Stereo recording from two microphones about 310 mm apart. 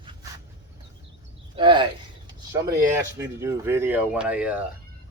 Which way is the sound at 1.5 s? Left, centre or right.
Centre.